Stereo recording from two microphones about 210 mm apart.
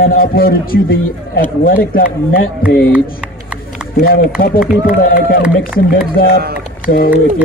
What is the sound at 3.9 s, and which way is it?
Speech, 45° left (ahead or behind).